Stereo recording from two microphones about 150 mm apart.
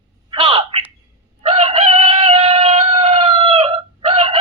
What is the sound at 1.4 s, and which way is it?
Chicken, 40° right (ahead or behind).